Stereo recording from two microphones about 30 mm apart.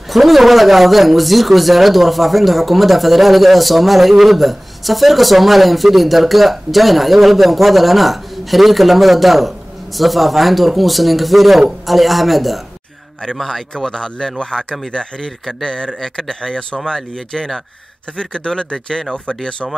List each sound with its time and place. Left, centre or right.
0.1 s speech: centre
13.7 s speech: left
16.0 s speech: centre
16.3 s speech: left